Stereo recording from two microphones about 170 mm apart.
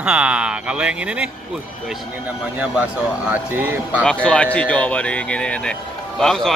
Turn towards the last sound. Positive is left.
turn(degrees=0)  # may be behind; listen again after turning